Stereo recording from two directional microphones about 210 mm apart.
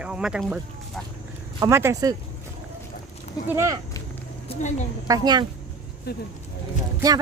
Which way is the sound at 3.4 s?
15° right (ahead or behind).